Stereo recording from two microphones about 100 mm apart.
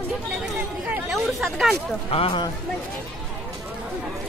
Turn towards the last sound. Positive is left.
turn(degrees=70)  # may be behind; listen again after turning